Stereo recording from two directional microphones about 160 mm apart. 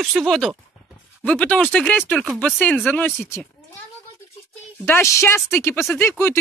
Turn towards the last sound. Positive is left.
turn(degrees=15)  # may be behind; listen again after turning